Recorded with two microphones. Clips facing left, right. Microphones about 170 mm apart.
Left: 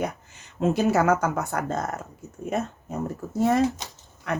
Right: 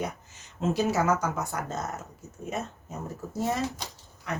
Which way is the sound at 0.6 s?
60° left (ahead or behind).